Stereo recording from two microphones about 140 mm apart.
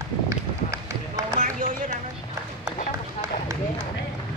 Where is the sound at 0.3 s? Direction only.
25° right (ahead or behind).